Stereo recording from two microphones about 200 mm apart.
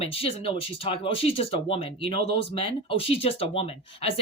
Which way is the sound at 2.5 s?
25° left (ahead or behind).